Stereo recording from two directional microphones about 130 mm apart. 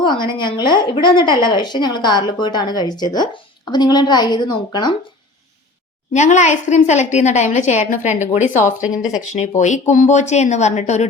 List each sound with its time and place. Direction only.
0.0 s a woman's voice: 35° left (ahead or behind)
6.1 s a woman's voice: 65° left (ahead or behind)
9.0 s speech: 5° right (ahead or behind)
9.6 s a woman's voice: 65° left (ahead or behind)